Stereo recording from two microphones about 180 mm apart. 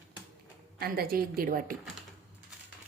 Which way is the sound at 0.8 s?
60° right (ahead or behind).